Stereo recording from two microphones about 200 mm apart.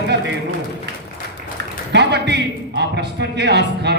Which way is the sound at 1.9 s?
60° right (ahead or behind).